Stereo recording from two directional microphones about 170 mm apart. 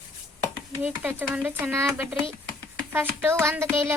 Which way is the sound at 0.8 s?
10° right (ahead or behind).